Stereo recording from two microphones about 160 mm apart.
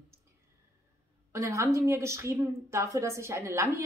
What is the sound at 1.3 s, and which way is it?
A woman's voice, 20° right (ahead or behind).